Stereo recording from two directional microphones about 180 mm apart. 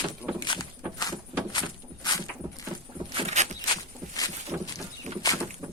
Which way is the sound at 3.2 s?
40° right (ahead or behind).